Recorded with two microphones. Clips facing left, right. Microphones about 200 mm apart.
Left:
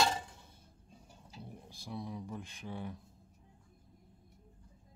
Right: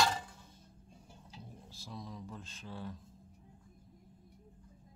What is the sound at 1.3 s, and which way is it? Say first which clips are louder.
Speech: left 4 dB; 10° left (ahead or behind).